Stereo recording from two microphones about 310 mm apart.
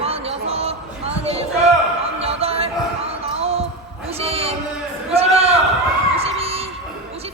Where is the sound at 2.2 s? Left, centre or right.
Centre.